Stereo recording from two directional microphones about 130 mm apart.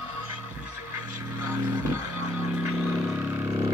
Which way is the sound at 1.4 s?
20° right (ahead or behind).